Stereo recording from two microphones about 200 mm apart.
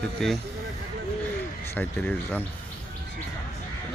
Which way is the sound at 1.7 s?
10° left (ahead or behind).